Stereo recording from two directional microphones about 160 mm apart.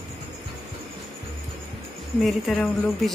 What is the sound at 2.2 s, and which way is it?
Speech, 5° left (ahead or behind).